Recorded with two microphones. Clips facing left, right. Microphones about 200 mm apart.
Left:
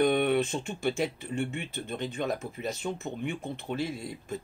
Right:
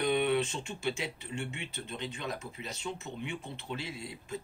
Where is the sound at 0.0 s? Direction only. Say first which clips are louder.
Left 4 dB; 50° left (ahead or behind).